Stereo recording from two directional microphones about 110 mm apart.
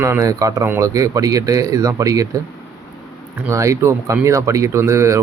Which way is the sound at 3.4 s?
30° right (ahead or behind).